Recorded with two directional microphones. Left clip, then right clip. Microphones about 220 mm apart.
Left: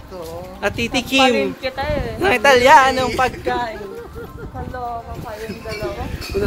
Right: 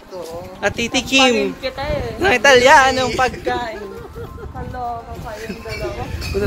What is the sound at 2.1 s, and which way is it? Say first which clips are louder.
A man's voice: right 2 dB; 5° left (ahead or behind).